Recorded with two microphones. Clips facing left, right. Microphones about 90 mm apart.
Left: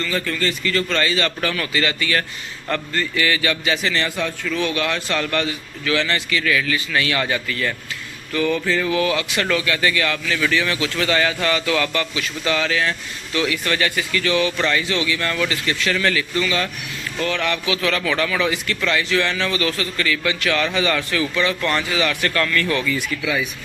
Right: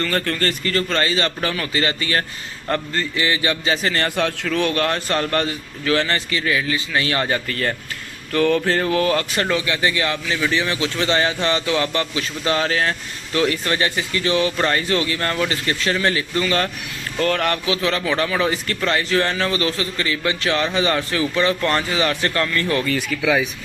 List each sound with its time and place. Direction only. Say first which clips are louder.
0.0 s speech: right 1 dB; 50° right (ahead or behind)
4.2 s speech: right 3 dB; 60° right (ahead or behind); by 7.8 s 40° right (ahead or behind)
8.3 s speech: right 3 dB; 55° right (ahead or behind)
9.5 s a man's voice: left 2 dB; 25° right (ahead or behind); by 17.7 s 45° right (ahead or behind)
17.7 s speech: even; 30° right (ahead or behind)